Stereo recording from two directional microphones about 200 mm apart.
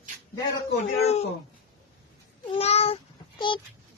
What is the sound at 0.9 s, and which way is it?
Speech, 35° left (ahead or behind).